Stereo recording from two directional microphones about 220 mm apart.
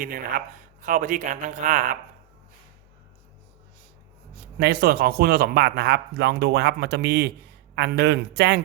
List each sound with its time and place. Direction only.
0.0 s speech: 40° right (ahead or behind)
4.4 s a man's voice: 45° right (ahead or behind)